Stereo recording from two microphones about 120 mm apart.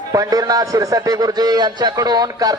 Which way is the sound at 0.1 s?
30° right (ahead or behind).